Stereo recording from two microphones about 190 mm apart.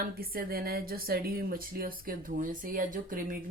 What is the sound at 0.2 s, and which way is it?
Speech, 50° right (ahead or behind).